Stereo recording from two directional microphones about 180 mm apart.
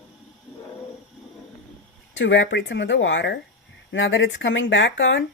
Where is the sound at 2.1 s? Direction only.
90° left.